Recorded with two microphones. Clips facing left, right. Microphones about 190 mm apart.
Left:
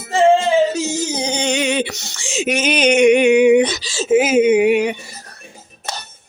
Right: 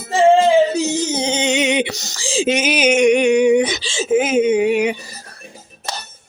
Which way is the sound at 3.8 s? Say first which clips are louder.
Right 2 dB; 25° right (ahead or behind).